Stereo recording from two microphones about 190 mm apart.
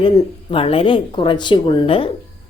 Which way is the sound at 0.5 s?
30° left (ahead or behind).